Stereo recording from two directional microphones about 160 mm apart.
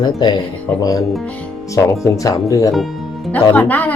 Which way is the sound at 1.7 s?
20° left (ahead or behind).